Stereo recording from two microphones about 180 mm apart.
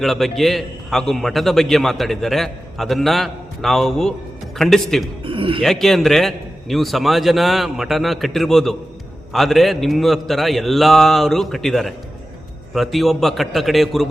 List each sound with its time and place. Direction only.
0.0 s a man's voice: centre (ahead or behind)
5.2 s a man's voice: 30° right (ahead or behind)
5.6 s a man's voice: centre (ahead or behind)